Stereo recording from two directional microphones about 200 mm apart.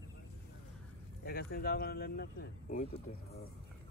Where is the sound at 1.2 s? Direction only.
50° left (ahead or behind).